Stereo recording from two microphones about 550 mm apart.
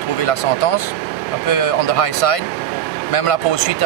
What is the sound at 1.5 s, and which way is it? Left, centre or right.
Speech, left.